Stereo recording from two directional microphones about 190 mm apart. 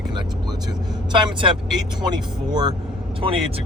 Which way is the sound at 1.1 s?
25° right (ahead or behind).